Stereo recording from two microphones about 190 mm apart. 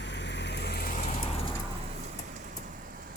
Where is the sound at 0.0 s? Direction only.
65° left (ahead or behind); by 1.0 s 50° left (ahead or behind).